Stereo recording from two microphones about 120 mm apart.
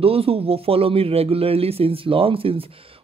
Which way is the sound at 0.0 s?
55° right (ahead or behind).